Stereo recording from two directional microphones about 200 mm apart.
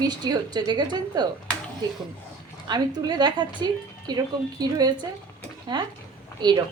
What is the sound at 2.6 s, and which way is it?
Speech, 20° right (ahead or behind).